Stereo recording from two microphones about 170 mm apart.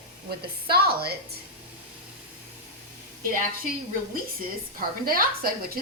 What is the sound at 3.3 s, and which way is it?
Speech, 55° right (ahead or behind).